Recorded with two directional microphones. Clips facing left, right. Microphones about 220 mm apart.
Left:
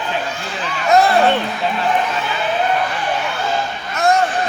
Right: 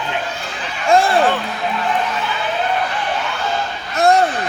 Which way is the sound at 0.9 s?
25° right (ahead or behind).